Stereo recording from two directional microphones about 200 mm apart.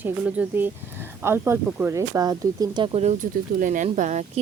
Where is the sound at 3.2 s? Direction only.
40° right (ahead or behind).